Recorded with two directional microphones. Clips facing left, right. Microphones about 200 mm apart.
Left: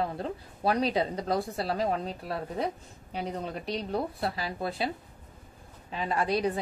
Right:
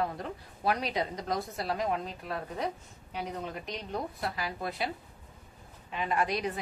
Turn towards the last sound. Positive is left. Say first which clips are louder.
# left 3 dB
turn(degrees=30)  # may be behind; listen again after turning